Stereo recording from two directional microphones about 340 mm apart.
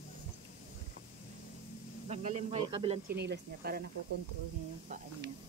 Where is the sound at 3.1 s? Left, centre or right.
Right.